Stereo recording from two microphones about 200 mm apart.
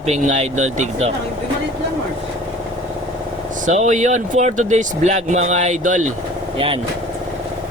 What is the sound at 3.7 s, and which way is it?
Speech, 40° right (ahead or behind).